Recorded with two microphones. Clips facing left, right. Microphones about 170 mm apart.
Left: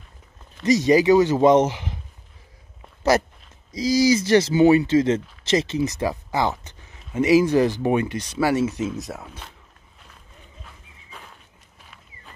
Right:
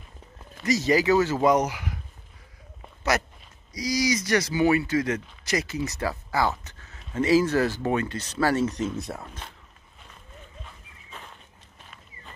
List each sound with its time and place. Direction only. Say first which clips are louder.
0.7 s speech: left 6 dB; 20° left (ahead or behind)
3.0 s walk: left 7 dB; 30° left (ahead or behind)
3.7 s speech: left 7 dB; 25° left (ahead or behind); by 9.5 s 5° left (ahead or behind)
10.6 s horse: even; 5° left (ahead or behind)